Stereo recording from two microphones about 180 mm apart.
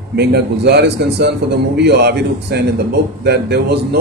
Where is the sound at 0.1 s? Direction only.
65° right (ahead or behind).